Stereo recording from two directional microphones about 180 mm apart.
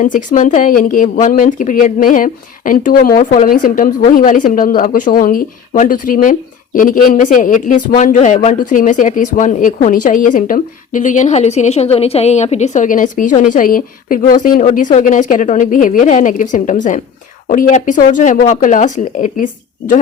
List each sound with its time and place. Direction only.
0.0 s speech: 45° left (ahead or behind)